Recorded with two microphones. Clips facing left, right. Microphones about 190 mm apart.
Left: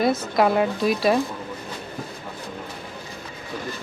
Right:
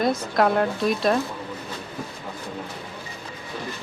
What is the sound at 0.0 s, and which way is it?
Speech, 5° left (ahead or behind).